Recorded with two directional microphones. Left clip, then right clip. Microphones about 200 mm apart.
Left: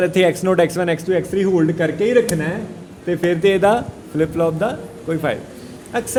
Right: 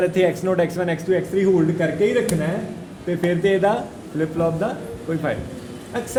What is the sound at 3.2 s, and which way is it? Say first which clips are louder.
A man's voice: left 4 dB; 55° left (ahead or behind).